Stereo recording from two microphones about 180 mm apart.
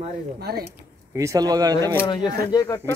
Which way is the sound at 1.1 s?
20° right (ahead or behind).